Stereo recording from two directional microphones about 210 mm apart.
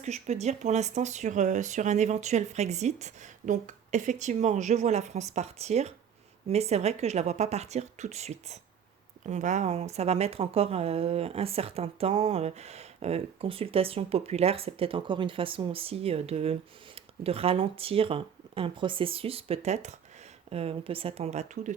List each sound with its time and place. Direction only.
0.0 s a woman's voice: 30° right (ahead or behind)